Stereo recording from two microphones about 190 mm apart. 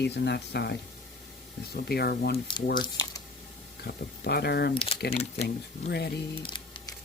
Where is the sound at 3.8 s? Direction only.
55° left (ahead or behind).